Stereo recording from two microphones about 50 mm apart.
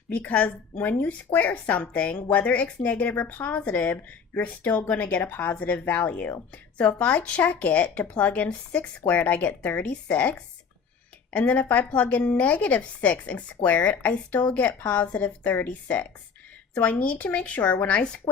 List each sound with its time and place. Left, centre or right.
0.1 s a woman's voice: left